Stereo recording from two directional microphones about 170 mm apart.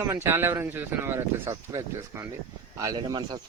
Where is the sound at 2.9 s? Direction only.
25° right (ahead or behind).